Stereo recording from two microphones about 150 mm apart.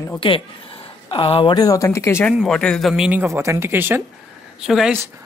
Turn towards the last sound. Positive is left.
turn(degrees=-5)  # may be behind; listen again after turning